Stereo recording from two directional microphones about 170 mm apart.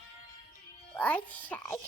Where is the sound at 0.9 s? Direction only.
10° left (ahead or behind).